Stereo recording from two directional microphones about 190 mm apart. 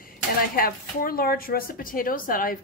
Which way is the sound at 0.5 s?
50° left (ahead or behind).